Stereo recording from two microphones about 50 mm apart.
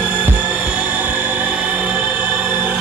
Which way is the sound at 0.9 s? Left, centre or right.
Right.